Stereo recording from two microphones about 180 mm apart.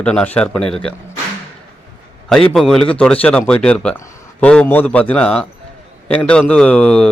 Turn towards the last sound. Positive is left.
turn(degrees=5)  # may be behind; listen again after turning